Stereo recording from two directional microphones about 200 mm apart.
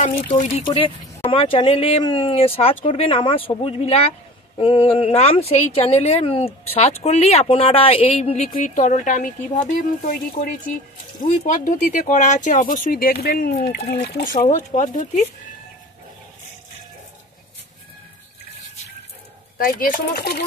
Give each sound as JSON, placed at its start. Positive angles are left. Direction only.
{"t": 0.0, "sound": "a woman's voice", "side_deg": 40}
{"t": 0.7, "sound": "a woman's voice", "side_deg": 25}
{"t": 19.6, "sound": "speech", "side_deg": 45}